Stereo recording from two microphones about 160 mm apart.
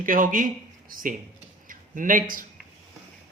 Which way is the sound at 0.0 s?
55° right (ahead or behind).